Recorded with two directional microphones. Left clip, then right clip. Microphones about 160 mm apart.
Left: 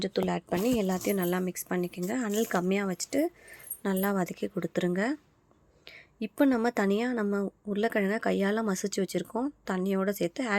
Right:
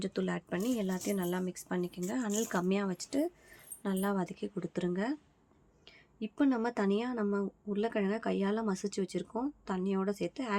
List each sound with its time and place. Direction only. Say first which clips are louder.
0.0 s speech: left 6 dB; 25° left (ahead or behind)